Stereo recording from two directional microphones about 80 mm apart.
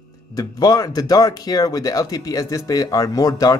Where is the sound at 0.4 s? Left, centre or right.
Left.